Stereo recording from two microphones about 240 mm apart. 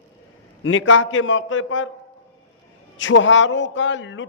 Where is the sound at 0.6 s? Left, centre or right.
Left.